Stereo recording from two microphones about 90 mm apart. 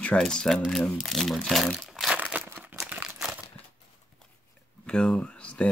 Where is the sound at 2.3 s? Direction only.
20° right (ahead or behind).